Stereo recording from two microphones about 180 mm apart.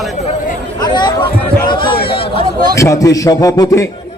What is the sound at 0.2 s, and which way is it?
Speech, 50° left (ahead or behind).